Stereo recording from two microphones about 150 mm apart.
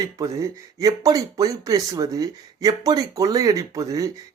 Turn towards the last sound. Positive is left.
turn(degrees=-20)  # may be behind; listen again after turning